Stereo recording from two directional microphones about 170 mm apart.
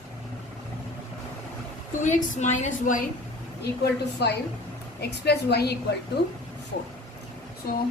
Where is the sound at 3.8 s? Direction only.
75° left (ahead or behind).